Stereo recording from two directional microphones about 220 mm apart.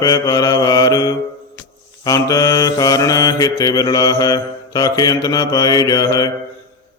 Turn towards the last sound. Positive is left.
turn(degrees=15)  # may be behind; listen again after turning